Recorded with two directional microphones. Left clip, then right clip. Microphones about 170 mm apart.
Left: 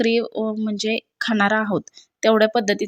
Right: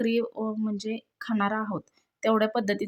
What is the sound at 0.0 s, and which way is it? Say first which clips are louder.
Speech: left 7 dB; 20° left (ahead or behind).